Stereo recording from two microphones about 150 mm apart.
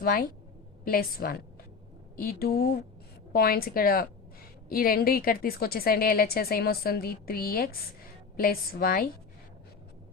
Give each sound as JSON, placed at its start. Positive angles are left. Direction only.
{"t": 0.0, "sound": "a woman's voice", "side_deg": 75}